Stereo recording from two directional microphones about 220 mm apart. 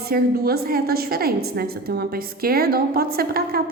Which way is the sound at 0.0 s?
45° right (ahead or behind).